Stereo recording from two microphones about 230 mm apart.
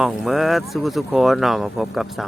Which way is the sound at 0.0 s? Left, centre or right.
Centre.